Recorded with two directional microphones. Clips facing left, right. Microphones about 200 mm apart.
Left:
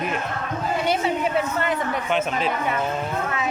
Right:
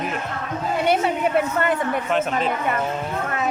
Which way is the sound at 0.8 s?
55° right (ahead or behind).